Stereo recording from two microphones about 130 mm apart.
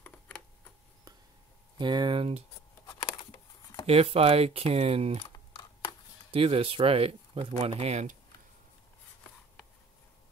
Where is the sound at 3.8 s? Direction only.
50° right (ahead or behind).